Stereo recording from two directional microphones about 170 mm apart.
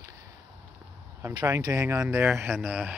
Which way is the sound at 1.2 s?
20° right (ahead or behind).